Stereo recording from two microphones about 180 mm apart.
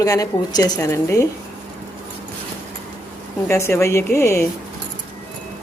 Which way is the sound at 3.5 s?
15° left (ahead or behind).